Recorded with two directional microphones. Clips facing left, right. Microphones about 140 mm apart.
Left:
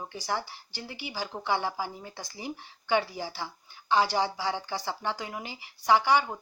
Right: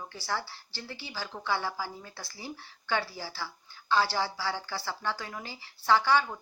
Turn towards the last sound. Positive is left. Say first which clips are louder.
# left 2 dB
turn(degrees=15)  # may be behind; listen again after turning